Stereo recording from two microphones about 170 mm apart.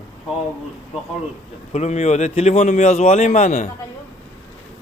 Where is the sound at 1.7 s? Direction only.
40° left (ahead or behind).